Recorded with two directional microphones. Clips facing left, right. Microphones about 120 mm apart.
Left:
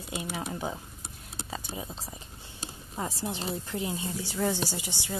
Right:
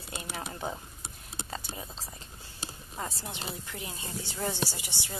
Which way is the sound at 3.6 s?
25° left (ahead or behind).